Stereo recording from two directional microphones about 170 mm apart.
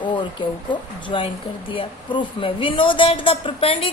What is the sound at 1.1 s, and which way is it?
Speech, 30° left (ahead or behind).